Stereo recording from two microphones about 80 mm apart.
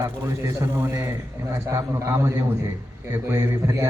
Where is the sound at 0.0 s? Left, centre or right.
Right.